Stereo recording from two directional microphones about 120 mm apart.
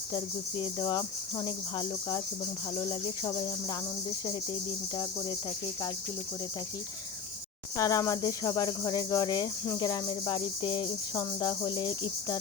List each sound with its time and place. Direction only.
0.6 s speech: 40° left (ahead or behind)
7.8 s speech: 30° left (ahead or behind); by 10.8 s 45° left (ahead or behind)
11.1 s speech: 30° left (ahead or behind)